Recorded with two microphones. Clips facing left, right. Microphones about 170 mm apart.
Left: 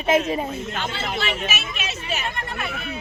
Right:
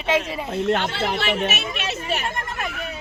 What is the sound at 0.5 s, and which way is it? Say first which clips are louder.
Speech: right 7 dB; 65° right (ahead or behind).